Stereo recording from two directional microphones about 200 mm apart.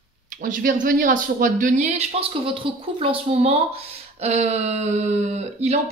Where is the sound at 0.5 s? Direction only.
40° right (ahead or behind).